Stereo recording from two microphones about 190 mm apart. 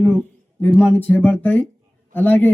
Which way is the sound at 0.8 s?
10° left (ahead or behind).